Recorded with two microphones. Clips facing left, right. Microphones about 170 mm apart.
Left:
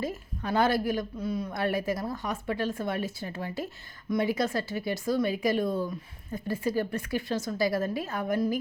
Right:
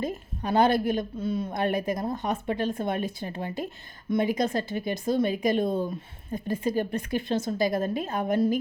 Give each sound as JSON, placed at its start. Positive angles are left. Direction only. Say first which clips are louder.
{"t": 0.0, "sound": "a woman's voice", "louder": "right 2 dB", "side_deg": -20}